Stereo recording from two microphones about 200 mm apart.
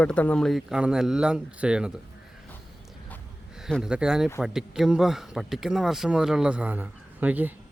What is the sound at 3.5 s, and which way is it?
Speech, centre (ahead or behind).